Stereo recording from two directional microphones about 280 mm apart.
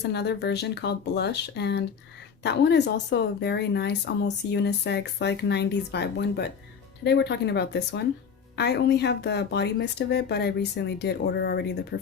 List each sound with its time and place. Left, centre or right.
0.0 s speech: left